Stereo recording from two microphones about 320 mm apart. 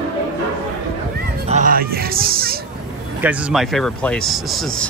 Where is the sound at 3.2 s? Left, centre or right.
Centre.